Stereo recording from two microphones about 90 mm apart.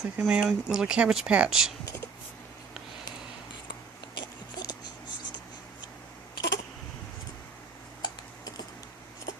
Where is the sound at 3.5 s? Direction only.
60° left (ahead or behind).